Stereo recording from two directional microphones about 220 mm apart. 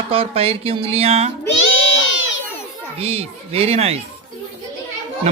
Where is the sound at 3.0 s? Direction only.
25° right (ahead or behind).